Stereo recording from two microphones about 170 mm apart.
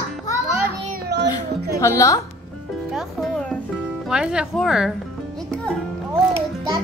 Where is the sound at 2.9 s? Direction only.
5° left (ahead or behind).